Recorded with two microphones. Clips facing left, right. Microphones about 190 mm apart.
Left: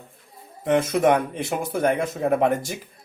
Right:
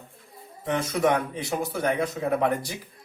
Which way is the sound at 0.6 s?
50° left (ahead or behind).